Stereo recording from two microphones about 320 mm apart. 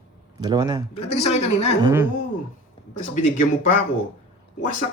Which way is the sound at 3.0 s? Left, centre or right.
Left.